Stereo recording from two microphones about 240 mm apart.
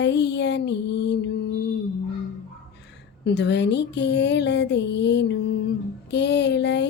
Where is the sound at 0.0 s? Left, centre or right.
Left.